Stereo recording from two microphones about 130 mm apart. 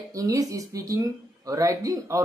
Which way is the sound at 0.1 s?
25° right (ahead or behind).